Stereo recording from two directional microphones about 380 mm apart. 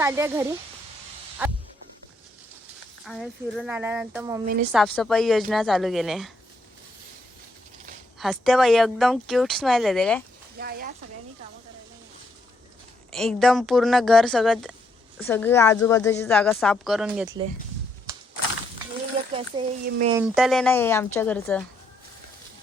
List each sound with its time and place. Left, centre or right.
0.0 s a woman's voice: centre
3.0 s a woman's voice: centre
8.2 s a woman's voice: centre
10.6 s a sound: right
13.1 s a woman's voice: centre
19.4 s speech: centre
20.2 s a woman's voice: centre